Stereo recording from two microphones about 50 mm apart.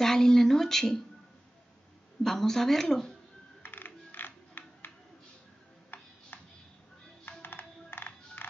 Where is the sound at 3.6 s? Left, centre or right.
Left.